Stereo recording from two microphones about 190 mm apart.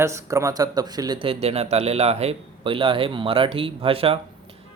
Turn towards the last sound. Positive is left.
turn(degrees=-30)  # may be behind; listen again after turning